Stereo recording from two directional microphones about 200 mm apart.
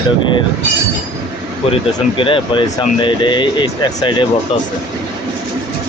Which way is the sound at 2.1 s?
25° left (ahead or behind).